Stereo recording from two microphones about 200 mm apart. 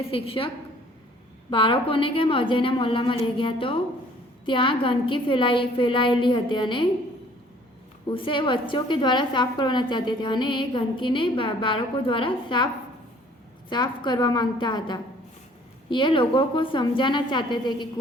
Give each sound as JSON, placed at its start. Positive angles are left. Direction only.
{"t": 0.1, "sound": "a woman's voice", "side_deg": 25}
{"t": 8.1, "sound": "a woman's voice", "side_deg": 25}
{"t": 13.7, "sound": "a woman's voice", "side_deg": 20}